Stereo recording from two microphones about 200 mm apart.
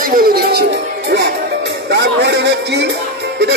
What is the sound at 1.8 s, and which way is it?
Speech, 60° right (ahead or behind).